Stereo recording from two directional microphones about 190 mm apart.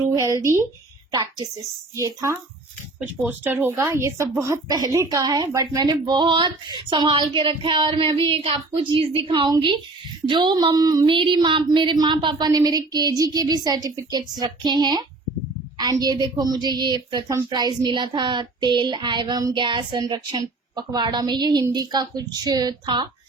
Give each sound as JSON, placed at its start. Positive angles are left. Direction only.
{"t": 0.0, "sound": "speech", "side_deg": -15}
{"t": 2.0, "sound": "a woman's voice", "side_deg": -15}
{"t": 6.9, "sound": "a sound", "side_deg": -25}